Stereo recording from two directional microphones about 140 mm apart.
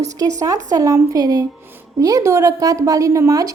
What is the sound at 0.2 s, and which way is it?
A woman's voice, 25° right (ahead or behind).